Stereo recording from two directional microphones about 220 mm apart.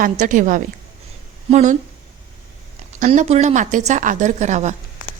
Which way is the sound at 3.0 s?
35° right (ahead or behind).